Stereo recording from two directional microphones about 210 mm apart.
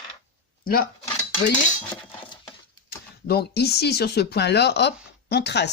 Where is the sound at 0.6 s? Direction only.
45° left (ahead or behind).